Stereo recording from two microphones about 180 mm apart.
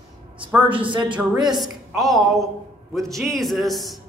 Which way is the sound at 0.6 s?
30° right (ahead or behind).